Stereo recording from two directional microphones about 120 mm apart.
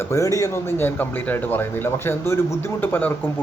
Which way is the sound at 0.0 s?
25° left (ahead or behind).